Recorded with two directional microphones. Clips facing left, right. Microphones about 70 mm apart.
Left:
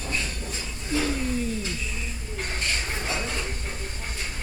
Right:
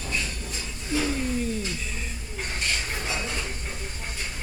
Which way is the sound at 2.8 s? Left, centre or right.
Centre.